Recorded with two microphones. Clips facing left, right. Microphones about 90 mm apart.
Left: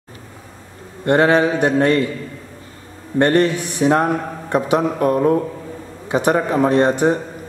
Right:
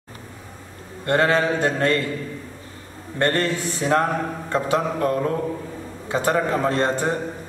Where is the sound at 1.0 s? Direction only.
20° left (ahead or behind).